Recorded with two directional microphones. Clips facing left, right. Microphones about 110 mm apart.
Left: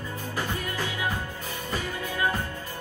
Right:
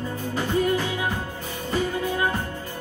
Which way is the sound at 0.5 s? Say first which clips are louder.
Right 9 dB; 25° right (ahead or behind).